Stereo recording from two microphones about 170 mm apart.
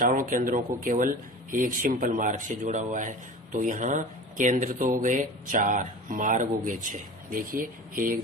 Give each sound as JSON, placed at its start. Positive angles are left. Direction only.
{"t": 0.0, "sound": "speech", "side_deg": -50}